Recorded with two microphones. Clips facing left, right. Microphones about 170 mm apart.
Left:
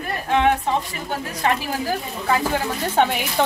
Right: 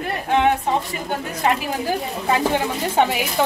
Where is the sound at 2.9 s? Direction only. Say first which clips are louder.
Even; centre (ahead or behind).